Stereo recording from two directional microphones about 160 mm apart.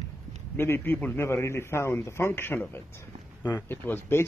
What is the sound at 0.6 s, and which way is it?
A man's voice, 15° left (ahead or behind).